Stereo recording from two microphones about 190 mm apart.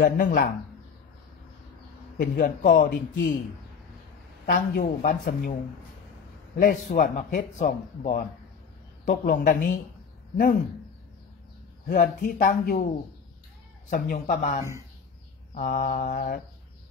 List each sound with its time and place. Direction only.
0.0 s a man's voice: 45° left (ahead or behind)
2.1 s a man's voice: 45° left (ahead or behind)
4.5 s a man's voice: 45° left (ahead or behind)
6.6 s a man's voice: 45° left (ahead or behind)
9.0 s a man's voice: 50° left (ahead or behind)
11.9 s a man's voice: 50° left (ahead or behind)
13.8 s a man's voice: 50° left (ahead or behind)